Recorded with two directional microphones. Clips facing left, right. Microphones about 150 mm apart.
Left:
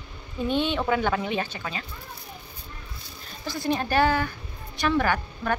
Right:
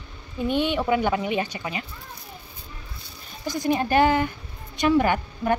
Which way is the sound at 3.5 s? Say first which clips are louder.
Right 3 dB; 15° right (ahead or behind).